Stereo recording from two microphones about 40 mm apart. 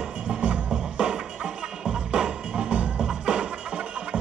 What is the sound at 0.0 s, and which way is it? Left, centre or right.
Music, right.